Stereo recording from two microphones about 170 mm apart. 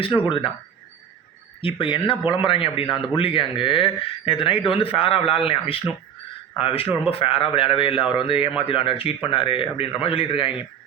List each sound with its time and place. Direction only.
0.3 s speech: 30° left (ahead or behind)
1.6 s a man's voice: 30° left (ahead or behind)